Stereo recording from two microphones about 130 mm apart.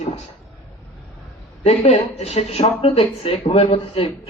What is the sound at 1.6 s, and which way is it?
A woman's voice, 60° left (ahead or behind).